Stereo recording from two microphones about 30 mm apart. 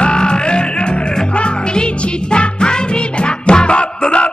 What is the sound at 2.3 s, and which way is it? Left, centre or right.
Music, left.